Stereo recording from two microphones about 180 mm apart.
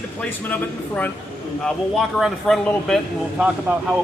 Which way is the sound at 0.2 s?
10° left (ahead or behind).